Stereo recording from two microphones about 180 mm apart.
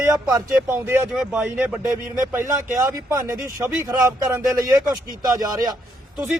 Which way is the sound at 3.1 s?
15° right (ahead or behind).